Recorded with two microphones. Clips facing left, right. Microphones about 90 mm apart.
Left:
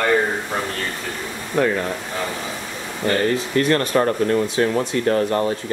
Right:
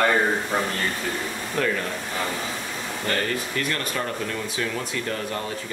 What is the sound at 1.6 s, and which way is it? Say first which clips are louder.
Speech: left 6 dB; 20° left (ahead or behind).